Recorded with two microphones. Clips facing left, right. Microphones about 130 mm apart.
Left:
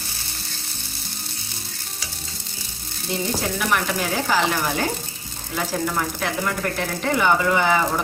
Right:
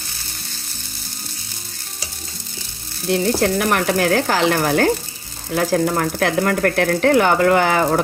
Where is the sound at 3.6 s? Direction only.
50° right (ahead or behind).